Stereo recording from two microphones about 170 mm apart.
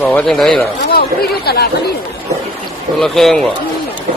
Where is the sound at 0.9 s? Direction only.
65° left (ahead or behind).